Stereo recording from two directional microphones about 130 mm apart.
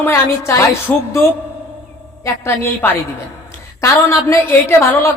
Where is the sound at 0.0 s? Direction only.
20° left (ahead or behind).